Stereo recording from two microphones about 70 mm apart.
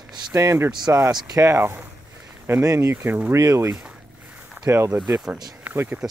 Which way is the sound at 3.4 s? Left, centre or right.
Right.